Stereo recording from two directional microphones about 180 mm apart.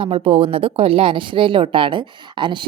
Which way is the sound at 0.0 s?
30° right (ahead or behind).